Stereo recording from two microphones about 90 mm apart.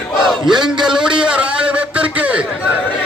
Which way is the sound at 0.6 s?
5° right (ahead or behind).